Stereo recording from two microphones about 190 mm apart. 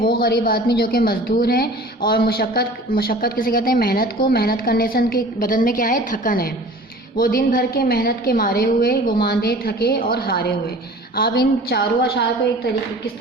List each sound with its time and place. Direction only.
0.0 s a woman's voice: 50° left (ahead or behind)